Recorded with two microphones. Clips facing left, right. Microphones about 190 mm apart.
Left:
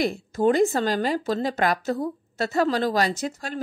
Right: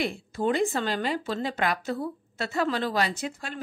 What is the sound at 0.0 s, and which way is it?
A woman's voice, 40° left (ahead or behind).